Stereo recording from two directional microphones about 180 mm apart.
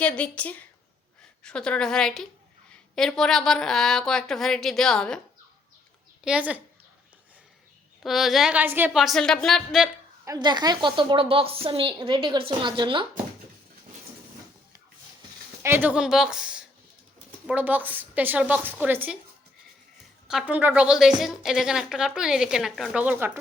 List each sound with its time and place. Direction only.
0.0 s a woman's voice: 5° left (ahead or behind)
6.2 s a woman's voice: 5° right (ahead or behind)
8.0 s a woman's voice: centre (ahead or behind)
10.2 s a woman's voice: 25° right (ahead or behind)
15.6 s a woman's voice: 10° right (ahead or behind)
20.2 s a woman's voice: 5° right (ahead or behind)